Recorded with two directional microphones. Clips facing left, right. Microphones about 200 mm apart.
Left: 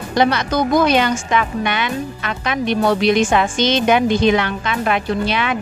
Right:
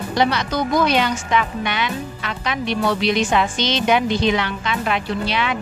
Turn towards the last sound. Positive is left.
turn(degrees=50)  # may be behind; listen again after turning